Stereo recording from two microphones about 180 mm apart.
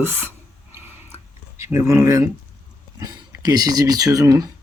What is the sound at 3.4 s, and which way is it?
Speech, 20° right (ahead or behind).